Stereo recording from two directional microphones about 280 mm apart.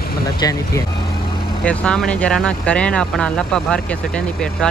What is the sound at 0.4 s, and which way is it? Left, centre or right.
Speech, centre.